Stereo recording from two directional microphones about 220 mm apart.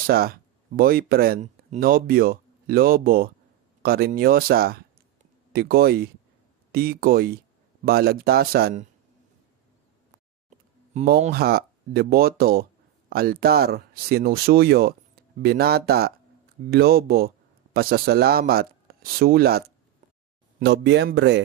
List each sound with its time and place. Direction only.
0.1 s speech: 40° right (ahead or behind)
10.9 s speech: 45° right (ahead or behind)